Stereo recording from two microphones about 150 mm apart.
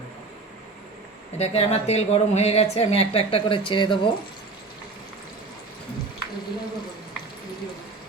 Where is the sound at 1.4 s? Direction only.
45° left (ahead or behind).